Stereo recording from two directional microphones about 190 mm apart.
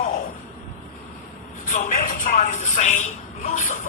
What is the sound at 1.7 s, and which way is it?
Music, 45° left (ahead or behind).